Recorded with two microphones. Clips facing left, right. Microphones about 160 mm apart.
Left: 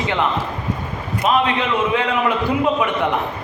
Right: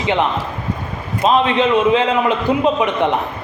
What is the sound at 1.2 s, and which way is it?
A man's voice, 25° right (ahead or behind).